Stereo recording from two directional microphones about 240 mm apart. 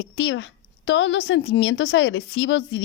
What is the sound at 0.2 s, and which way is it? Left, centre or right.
A woman's voice, left.